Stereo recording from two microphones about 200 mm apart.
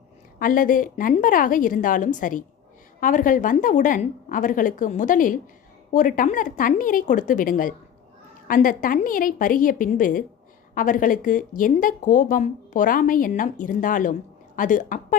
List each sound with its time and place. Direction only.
0.3 s a woman's voice: 45° left (ahead or behind)